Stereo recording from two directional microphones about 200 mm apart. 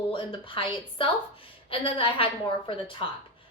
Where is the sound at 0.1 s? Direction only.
25° left (ahead or behind).